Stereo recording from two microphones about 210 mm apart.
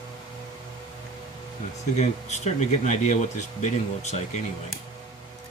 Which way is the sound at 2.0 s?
35° left (ahead or behind).